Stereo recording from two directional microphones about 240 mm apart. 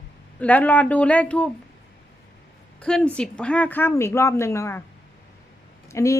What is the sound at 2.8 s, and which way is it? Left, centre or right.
Speech, centre.